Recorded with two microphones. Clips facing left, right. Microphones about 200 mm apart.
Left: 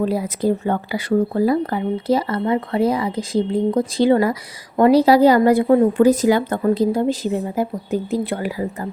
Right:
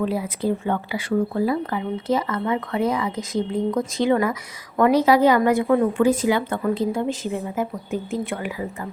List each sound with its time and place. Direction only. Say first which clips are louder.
0.0 s speech: left 4 dB; 40° left (ahead or behind)